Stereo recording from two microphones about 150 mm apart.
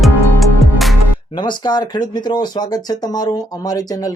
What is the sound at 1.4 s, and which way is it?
Speech, 30° left (ahead or behind).